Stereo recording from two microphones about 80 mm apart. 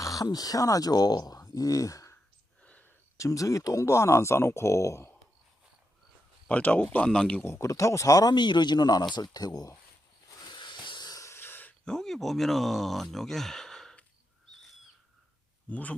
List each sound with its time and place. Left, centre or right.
0.0 s speech: left
2.6 s a sound: centre
3.2 s speech: left
6.5 s speech: centre
7.4 s speech: left
8.3 s speech: left
10.4 s wheeze: left
11.2 s snort: left
11.9 s speech: centre
15.7 s a man's voice: centre